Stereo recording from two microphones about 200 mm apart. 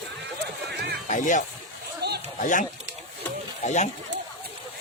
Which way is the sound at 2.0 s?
55° right (ahead or behind).